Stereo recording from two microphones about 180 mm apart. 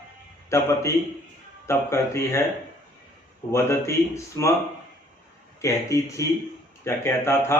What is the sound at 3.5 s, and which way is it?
Speech, 15° left (ahead or behind).